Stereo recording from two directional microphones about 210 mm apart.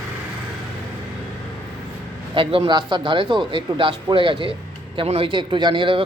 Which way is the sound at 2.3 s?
25° right (ahead or behind).